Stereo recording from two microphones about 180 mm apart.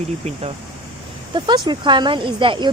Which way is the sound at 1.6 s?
25° right (ahead or behind).